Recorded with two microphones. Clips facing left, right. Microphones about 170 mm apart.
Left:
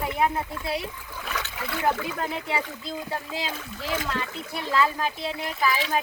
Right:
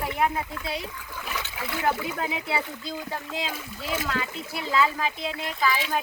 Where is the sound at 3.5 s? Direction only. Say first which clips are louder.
Left 1 dB; 5° right (ahead or behind).